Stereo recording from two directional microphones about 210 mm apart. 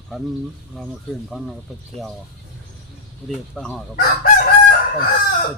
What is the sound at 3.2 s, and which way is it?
Speech, 5° left (ahead or behind).